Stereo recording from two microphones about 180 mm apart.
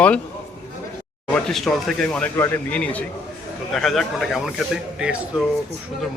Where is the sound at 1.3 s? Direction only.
Centre (ahead or behind).